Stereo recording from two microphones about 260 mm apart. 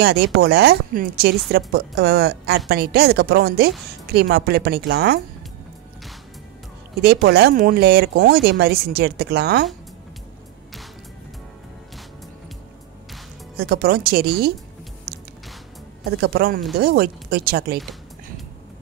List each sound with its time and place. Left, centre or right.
0.0 s speech: right
7.2 s speech: right
13.6 s speech: right
16.2 s speech: right